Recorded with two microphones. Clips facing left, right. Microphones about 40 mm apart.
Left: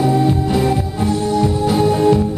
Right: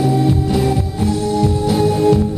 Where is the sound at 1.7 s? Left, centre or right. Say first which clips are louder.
Even; centre.